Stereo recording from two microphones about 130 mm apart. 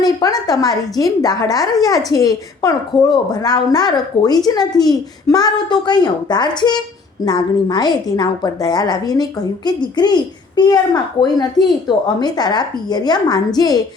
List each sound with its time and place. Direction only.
0.0 s a woman's voice: 30° left (ahead or behind)